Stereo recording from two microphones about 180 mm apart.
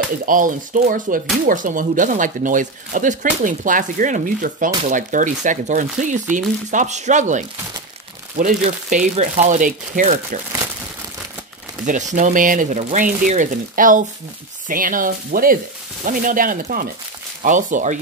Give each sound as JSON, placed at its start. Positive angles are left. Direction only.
{"t": 0.2, "sound": "speech", "side_deg": -50}
{"t": 8.9, "sound": "speech", "side_deg": -45}
{"t": 11.8, "sound": "speech", "side_deg": -45}